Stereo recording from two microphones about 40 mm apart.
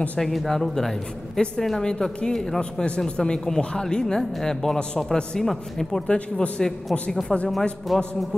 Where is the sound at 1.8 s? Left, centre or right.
Centre.